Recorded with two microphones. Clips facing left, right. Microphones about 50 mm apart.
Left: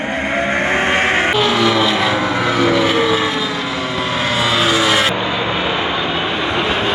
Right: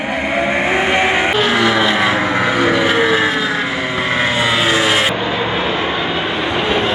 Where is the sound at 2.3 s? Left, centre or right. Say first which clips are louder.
Right 1 dB; centre.